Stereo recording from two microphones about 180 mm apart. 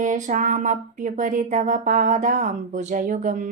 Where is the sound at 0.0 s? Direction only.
45° right (ahead or behind).